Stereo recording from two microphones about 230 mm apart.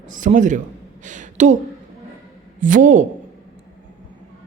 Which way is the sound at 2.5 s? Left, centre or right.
Right.